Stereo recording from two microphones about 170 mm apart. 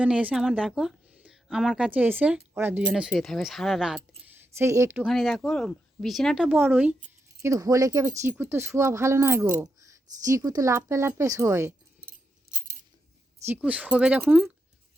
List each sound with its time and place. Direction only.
0.0 s speech: 10° right (ahead or behind)
4.5 s speech: 15° right (ahead or behind)
5.0 s speech: centre (ahead or behind); by 11.7 s 15° right (ahead or behind)
13.4 s speech: 10° right (ahead or behind)